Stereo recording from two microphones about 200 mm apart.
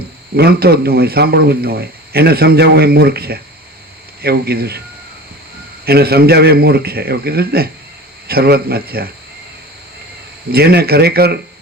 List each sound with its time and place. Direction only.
0.3 s speech: 50° right (ahead or behind)
5.8 s speech: 50° right (ahead or behind)
10.5 s speech: 50° right (ahead or behind)